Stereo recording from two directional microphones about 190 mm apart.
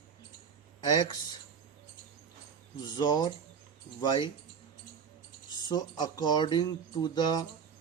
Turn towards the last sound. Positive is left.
turn(degrees=20)  # may be behind; listen again after turning